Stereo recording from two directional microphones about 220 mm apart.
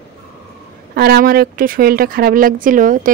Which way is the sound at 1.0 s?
45° right (ahead or behind).